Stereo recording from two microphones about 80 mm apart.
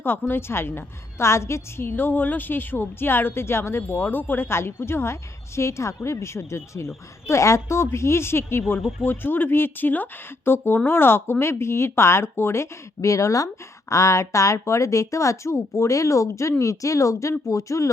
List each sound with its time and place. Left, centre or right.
0.0 s a woman's voice: left